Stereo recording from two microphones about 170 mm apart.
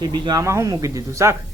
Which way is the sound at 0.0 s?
25° right (ahead or behind).